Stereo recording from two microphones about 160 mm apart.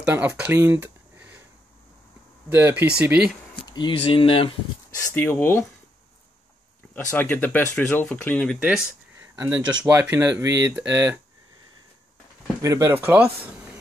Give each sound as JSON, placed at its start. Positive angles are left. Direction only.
{"t": 0.1, "sound": "speech", "side_deg": -15}
{"t": 2.5, "sound": "speech", "side_deg": -15}
{"t": 3.6, "sound": "speech", "side_deg": 30}
{"t": 5.1, "sound": "speech", "side_deg": 15}
{"t": 7.1, "sound": "speech", "side_deg": 10}
{"t": 8.5, "sound": "speech", "side_deg": -10}
{"t": 12.6, "sound": "speech", "side_deg": -20}